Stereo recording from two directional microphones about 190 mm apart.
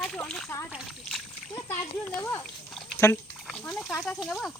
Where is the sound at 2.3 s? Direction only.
10° left (ahead or behind).